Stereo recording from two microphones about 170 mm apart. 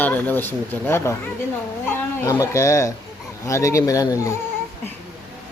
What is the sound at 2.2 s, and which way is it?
Speech, 20° left (ahead or behind).